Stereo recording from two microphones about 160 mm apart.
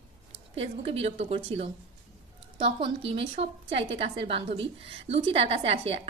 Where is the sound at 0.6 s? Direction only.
40° right (ahead or behind).